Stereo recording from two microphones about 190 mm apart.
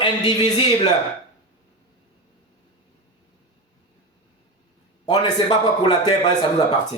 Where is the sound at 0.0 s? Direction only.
25° left (ahead or behind).